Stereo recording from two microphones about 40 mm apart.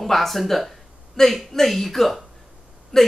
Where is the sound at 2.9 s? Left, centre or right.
Centre.